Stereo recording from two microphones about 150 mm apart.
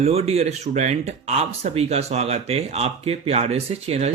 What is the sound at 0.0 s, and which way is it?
Speech, 45° right (ahead or behind).